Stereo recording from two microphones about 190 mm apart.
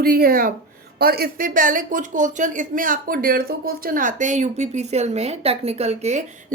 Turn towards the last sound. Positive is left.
turn(degrees=-40)  # may be behind; listen again after turning